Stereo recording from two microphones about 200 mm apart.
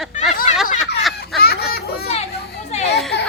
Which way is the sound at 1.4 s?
50° left (ahead or behind).